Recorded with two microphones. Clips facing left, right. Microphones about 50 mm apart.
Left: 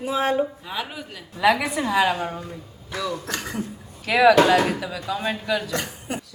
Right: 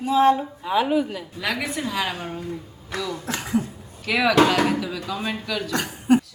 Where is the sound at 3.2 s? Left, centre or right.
Centre.